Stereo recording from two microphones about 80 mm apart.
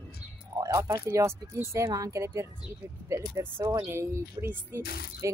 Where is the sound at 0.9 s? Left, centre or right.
Right.